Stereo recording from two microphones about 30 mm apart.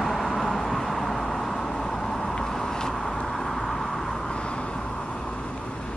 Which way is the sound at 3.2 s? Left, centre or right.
Centre.